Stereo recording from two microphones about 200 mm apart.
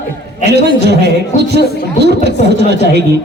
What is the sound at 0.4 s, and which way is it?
A man's voice, 55° right (ahead or behind).